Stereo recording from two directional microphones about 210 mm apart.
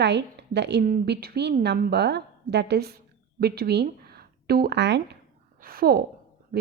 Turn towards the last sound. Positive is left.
turn(degrees=-45)  # may be behind; listen again after turning